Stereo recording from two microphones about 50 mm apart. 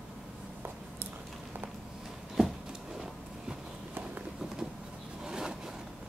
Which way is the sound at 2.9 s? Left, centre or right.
Centre.